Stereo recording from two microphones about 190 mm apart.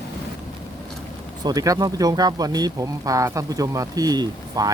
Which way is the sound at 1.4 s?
20° right (ahead or behind).